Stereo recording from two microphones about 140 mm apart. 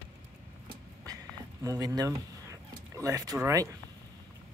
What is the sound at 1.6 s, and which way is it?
Speech, 25° right (ahead or behind).